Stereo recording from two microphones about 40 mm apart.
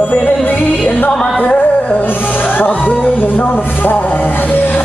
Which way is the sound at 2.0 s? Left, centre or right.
Left.